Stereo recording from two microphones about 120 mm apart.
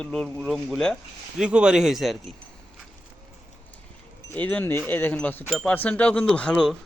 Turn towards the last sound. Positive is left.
turn(degrees=5)  # may be behind; listen again after turning